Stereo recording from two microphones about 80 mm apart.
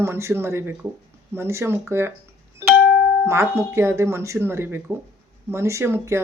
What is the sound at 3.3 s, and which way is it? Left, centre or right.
Speech, right.